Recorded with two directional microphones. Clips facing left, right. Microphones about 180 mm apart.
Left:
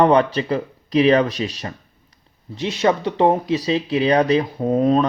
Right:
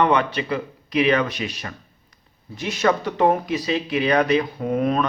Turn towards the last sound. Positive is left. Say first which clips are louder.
# left 4 dB
turn(degrees=30)  # may be behind; listen again after turning